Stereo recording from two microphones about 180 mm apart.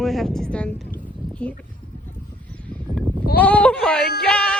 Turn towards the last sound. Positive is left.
turn(degrees=5)  # may be behind; listen again after turning